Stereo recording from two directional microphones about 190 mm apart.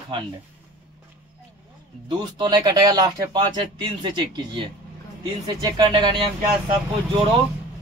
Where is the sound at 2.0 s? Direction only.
25° right (ahead or behind).